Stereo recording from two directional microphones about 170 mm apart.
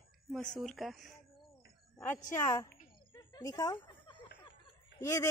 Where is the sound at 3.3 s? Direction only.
20° left (ahead or behind).